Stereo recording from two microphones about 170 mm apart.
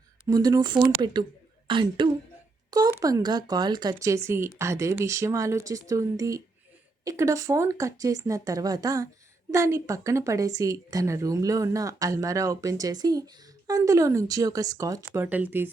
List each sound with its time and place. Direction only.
0.3 s a woman's voice: 25° right (ahead or behind)
15.2 s speech: 10° right (ahead or behind)